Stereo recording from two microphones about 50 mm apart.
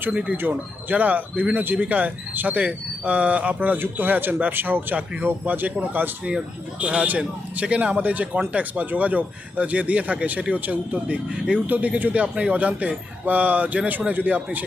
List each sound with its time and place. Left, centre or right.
0.1 s speech: right
0.3 s speech: right